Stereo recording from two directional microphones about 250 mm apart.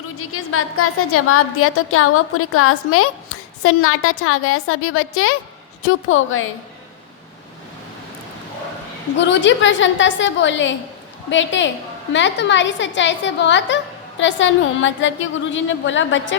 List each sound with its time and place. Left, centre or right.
0.2 s a woman's voice: left
9.1 s a woman's voice: left